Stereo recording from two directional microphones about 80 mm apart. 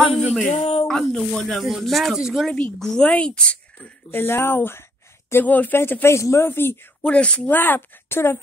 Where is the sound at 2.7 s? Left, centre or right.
Centre.